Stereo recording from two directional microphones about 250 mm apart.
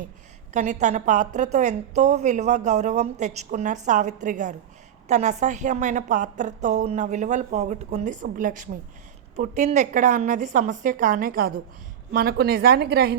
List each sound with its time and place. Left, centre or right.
0.5 s a woman's voice: right